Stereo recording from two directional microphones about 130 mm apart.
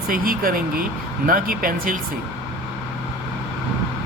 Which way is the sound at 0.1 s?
90° right.